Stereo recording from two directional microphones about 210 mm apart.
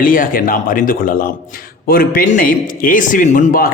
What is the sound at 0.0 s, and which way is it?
A man's voice, 40° left (ahead or behind).